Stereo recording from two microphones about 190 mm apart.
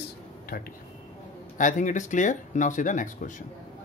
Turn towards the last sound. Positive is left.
turn(degrees=40)  # may be behind; listen again after turning